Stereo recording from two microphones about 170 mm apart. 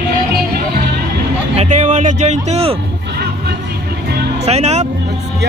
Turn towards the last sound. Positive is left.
turn(degrees=-40)  # may be behind; listen again after turning